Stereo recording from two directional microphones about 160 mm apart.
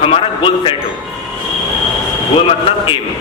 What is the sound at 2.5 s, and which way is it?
Speech, 35° left (ahead or behind).